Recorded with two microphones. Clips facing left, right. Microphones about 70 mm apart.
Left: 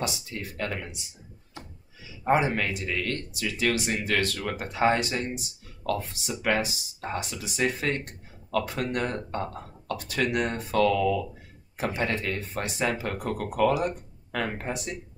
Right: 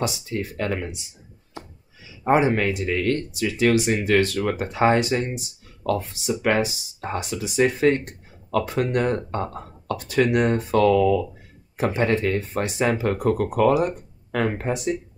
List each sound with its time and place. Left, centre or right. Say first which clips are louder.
0.6 s speech: right 4 dB; right
2.2 s speech: right 5 dB; right